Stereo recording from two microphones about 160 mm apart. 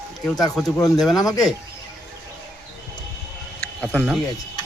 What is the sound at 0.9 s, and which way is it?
Speech, centre (ahead or behind).